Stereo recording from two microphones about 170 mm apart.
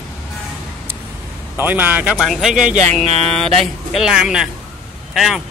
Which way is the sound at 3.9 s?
5° right (ahead or behind).